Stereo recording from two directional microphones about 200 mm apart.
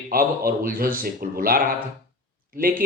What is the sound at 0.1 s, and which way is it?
Speech, 45° right (ahead or behind).